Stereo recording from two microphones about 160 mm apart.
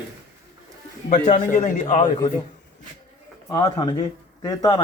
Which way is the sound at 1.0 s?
60° left (ahead or behind).